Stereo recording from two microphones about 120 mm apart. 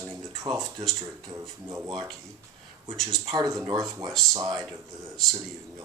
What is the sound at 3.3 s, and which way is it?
Speech, 30° right (ahead or behind).